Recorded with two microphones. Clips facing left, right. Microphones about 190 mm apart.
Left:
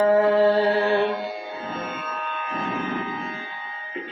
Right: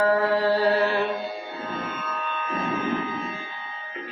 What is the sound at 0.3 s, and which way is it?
Mantra, 25° left (ahead or behind).